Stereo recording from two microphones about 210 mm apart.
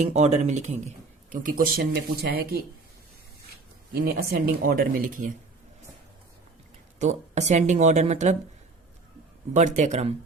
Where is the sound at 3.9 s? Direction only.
50° right (ahead or behind).